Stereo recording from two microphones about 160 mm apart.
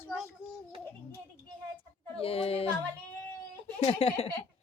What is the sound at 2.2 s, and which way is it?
Speech, 35° left (ahead or behind).